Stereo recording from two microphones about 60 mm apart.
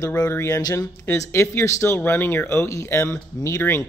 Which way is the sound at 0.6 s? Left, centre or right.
Left.